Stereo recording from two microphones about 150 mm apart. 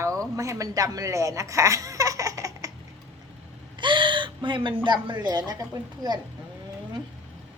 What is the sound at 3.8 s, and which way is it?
Speech, 30° right (ahead or behind).